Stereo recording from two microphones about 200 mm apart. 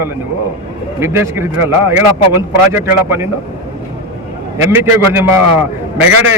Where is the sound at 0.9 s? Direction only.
15° right (ahead or behind).